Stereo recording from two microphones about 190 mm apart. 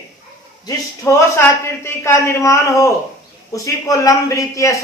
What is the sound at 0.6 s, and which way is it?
A man's voice, 15° left (ahead or behind).